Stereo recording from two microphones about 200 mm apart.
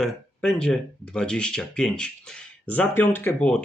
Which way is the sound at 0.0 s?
5° left (ahead or behind).